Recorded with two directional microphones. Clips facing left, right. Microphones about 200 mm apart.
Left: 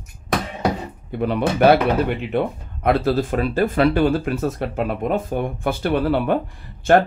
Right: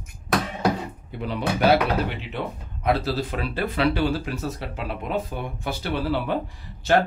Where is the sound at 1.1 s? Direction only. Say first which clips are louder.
Left 6 dB; 55° left (ahead or behind).